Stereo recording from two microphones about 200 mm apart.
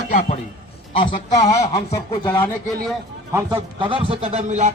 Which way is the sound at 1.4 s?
15° left (ahead or behind).